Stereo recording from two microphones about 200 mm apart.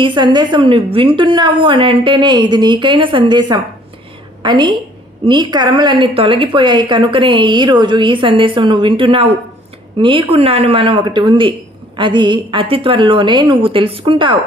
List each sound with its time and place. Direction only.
0.0 s a woman's voice: 25° right (ahead or behind)